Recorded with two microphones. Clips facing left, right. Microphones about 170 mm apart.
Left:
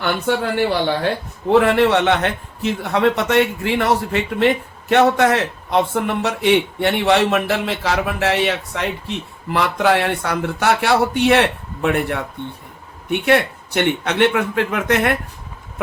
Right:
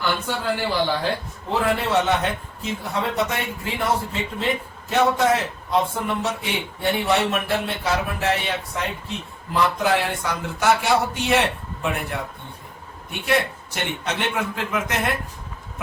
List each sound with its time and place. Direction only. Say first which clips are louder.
0.0 s a man's voice: left 5 dB; 65° left (ahead or behind)